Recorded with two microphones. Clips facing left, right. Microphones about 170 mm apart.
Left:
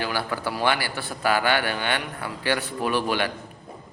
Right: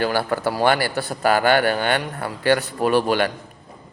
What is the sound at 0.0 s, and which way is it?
A man's voice, 45° right (ahead or behind).